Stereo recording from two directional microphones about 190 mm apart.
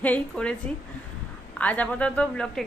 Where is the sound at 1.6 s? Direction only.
10° left (ahead or behind).